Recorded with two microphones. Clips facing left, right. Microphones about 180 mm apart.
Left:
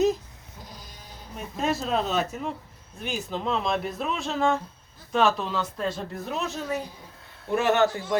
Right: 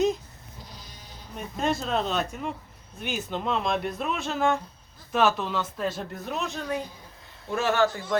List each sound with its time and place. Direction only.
1.4 s speech: 5° left (ahead or behind)
7.5 s a man's voice: 20° left (ahead or behind)